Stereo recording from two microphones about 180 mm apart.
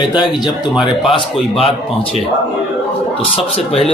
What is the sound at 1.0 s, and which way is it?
Speech, 30° left (ahead or behind).